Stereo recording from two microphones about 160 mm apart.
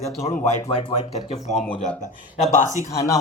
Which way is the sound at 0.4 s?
35° left (ahead or behind).